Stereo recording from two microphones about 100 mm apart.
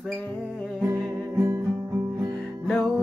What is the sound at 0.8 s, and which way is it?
Music, 35° right (ahead or behind).